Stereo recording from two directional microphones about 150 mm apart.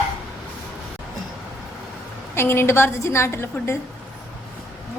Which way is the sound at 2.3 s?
15° left (ahead or behind).